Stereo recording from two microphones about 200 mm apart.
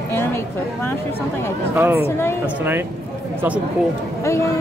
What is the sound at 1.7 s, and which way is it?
Speech, 10° right (ahead or behind).